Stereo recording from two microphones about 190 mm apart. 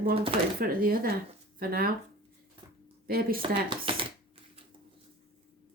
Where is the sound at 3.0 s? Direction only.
50° right (ahead or behind).